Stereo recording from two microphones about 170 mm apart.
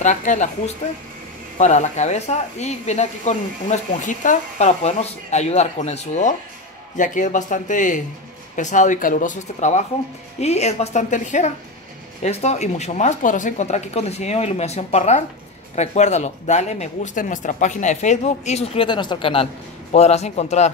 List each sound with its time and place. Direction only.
0.0 s speech: 45° left (ahead or behind)
1.6 s speech: 45° left (ahead or behind)